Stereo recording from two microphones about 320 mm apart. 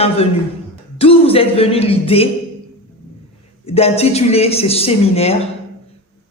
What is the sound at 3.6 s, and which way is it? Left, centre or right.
A man's voice, centre.